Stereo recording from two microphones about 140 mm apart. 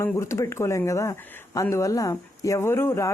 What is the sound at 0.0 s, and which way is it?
A woman's voice, 20° left (ahead or behind).